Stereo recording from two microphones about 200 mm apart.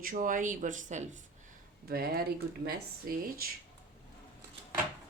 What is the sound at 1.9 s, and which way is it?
Speech, 50° right (ahead or behind).